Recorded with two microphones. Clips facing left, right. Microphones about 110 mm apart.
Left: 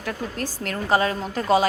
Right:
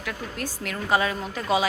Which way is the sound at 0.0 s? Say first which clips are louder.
Left 3 dB; 35° left (ahead or behind).